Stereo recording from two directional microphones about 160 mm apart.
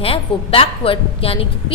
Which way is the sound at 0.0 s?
35° left (ahead or behind).